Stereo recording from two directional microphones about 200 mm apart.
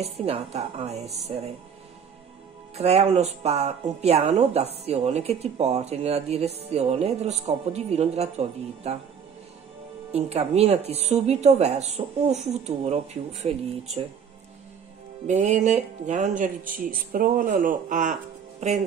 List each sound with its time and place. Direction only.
0.0 s speech: 30° right (ahead or behind)
2.7 s speech: 30° right (ahead or behind)
10.1 s speech: 30° right (ahead or behind)
15.2 s speech: 35° right (ahead or behind)